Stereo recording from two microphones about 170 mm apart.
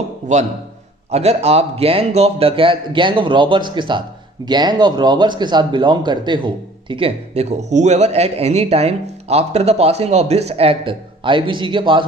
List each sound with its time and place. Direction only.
1.1 s speech: 40° right (ahead or behind)